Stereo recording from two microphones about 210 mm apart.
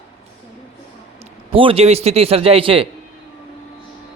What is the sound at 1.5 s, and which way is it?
Speech, 25° right (ahead or behind).